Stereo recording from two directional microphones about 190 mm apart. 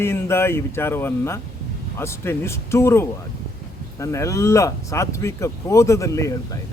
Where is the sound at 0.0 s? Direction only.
10° left (ahead or behind).